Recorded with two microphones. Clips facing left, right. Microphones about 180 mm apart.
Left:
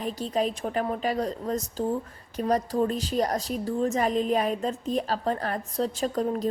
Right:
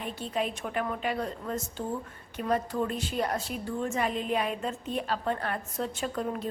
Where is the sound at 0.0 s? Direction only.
35° left (ahead or behind).